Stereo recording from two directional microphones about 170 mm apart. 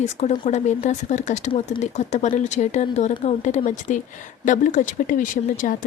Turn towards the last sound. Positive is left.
turn(degrees=50)  # may be behind; listen again after turning